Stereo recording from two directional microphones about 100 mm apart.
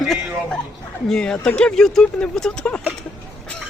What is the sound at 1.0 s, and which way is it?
Speech, 5° left (ahead or behind).